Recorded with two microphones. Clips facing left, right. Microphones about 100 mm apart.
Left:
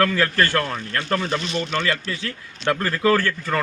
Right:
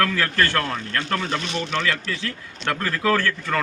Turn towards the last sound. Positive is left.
turn(degrees=0)  # may be behind; listen again after turning